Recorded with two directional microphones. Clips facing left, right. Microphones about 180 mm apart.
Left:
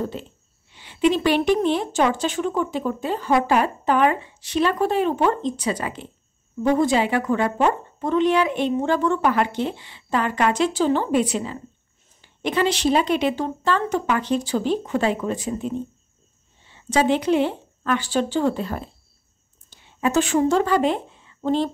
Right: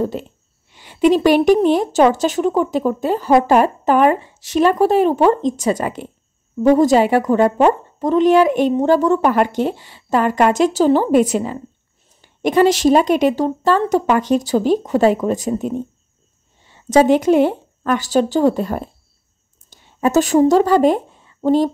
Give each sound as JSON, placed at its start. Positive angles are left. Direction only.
{"t": 0.7, "sound": "a woman's voice", "side_deg": -45}